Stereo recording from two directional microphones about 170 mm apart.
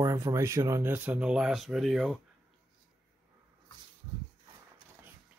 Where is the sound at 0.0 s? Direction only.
20° right (ahead or behind); by 2.1 s centre (ahead or behind).